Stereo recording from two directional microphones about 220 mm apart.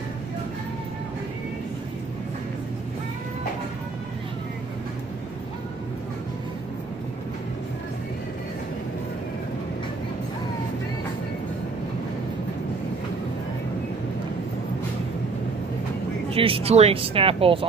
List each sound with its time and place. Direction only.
16.3 s speech: 25° right (ahead or behind)